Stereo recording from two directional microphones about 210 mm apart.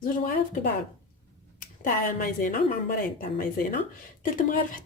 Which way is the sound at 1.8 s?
40° left (ahead or behind).